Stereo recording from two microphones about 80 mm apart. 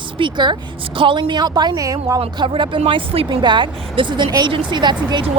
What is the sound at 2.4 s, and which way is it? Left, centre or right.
Speech, right.